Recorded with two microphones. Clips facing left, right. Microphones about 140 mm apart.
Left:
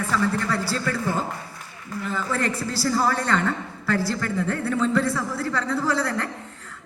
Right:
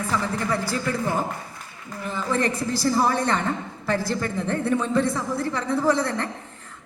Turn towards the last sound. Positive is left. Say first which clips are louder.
# right 2 dB
turn(degrees=-20)  # may be behind; listen again after turning